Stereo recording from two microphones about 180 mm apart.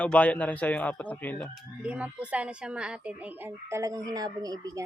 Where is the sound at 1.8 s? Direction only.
5° right (ahead or behind).